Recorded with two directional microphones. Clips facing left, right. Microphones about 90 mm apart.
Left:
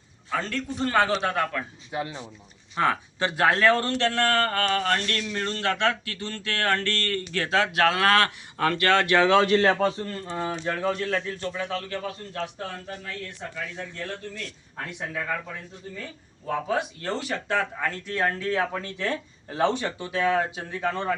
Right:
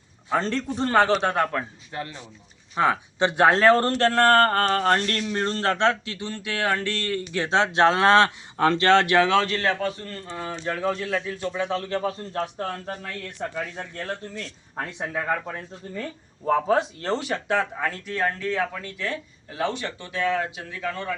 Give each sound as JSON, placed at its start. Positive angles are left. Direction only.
{"t": 0.3, "sound": "a man's voice", "side_deg": -30}
{"t": 1.9, "sound": "speech", "side_deg": 15}
{"t": 2.7, "sound": "a man's voice", "side_deg": -15}
{"t": 9.1, "sound": "speech", "side_deg": 0}
{"t": 9.4, "sound": "speech", "side_deg": 20}
{"t": 10.6, "sound": "a man's voice", "side_deg": 0}
{"t": 13.4, "sound": "speech", "side_deg": -60}
{"t": 13.8, "sound": "speech", "side_deg": -40}
{"t": 14.8, "sound": "a man's voice", "side_deg": -30}
{"t": 16.5, "sound": "a man's voice", "side_deg": -35}
{"t": 17.5, "sound": "speech", "side_deg": -10}
{"t": 18.1, "sound": "speech", "side_deg": 0}
{"t": 18.7, "sound": "speech", "side_deg": 25}